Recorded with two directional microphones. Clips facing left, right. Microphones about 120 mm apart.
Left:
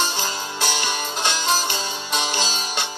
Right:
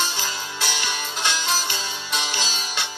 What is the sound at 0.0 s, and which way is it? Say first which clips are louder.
Music: left 3 dB; 45° left (ahead or behind).